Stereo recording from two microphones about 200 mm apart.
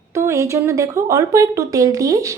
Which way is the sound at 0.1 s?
15° right (ahead or behind).